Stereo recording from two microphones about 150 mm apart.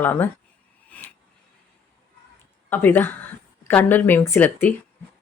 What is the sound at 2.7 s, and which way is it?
Speech, 15° left (ahead or behind).